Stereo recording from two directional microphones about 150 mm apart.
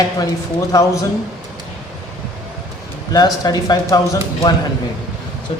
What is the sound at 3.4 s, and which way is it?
Speech, 25° left (ahead or behind).